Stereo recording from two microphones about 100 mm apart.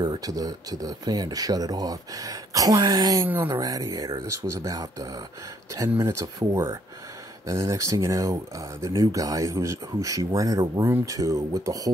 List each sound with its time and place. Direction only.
0.0 s speech: 40° right (ahead or behind)
5.9 s speech: 25° right (ahead or behind)
7.4 s speech: 30° right (ahead or behind)